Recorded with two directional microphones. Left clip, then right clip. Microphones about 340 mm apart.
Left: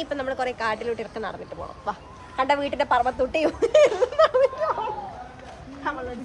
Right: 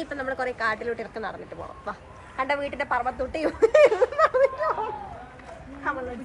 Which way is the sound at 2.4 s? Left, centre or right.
Left.